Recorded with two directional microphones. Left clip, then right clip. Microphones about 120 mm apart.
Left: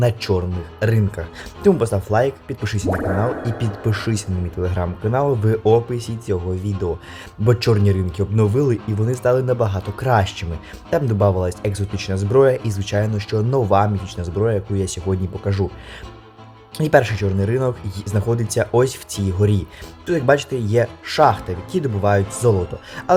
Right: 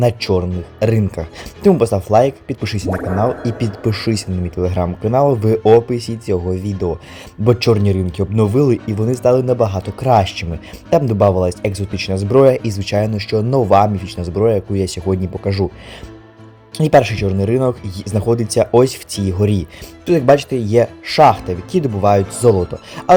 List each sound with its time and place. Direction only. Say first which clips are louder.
0.0 s speech: right 4 dB; 30° right (ahead or behind)
16.7 s speech: right 4 dB; 30° right (ahead or behind)